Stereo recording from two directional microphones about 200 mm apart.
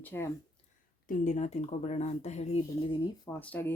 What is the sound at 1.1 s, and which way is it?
Speech, 40° left (ahead or behind).